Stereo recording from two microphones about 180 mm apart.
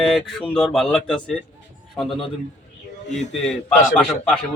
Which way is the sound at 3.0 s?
40° left (ahead or behind).